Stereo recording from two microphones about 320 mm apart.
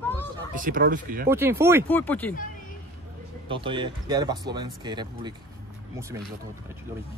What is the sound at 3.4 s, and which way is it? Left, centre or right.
Speech, centre.